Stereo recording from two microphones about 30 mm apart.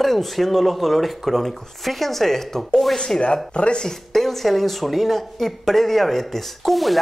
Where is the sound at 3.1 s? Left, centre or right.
Left.